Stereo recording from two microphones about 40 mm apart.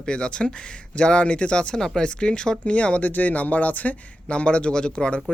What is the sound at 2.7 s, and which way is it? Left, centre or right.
Speech, left.